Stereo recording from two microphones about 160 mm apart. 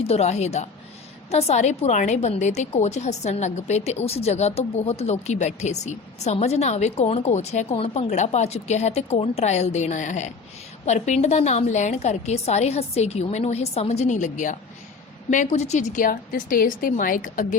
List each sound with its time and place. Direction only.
0.0 s a woman's voice: 40° left (ahead or behind); by 17.6 s 55° left (ahead or behind)